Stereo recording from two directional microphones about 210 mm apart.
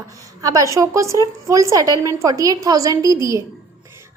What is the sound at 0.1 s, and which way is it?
A woman's voice, 15° right (ahead or behind).